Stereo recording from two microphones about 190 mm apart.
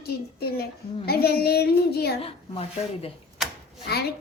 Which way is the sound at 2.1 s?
30° left (ahead or behind).